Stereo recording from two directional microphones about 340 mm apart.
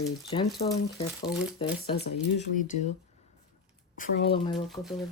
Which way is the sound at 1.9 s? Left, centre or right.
Left.